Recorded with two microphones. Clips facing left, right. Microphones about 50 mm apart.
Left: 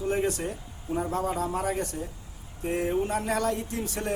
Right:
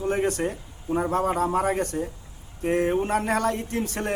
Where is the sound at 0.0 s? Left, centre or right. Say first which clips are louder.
Right 3 dB; right.